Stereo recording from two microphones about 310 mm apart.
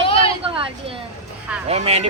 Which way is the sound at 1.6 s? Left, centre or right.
Centre.